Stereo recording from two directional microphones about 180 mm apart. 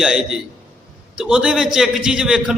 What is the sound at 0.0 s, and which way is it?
A man's voice, 5° right (ahead or behind).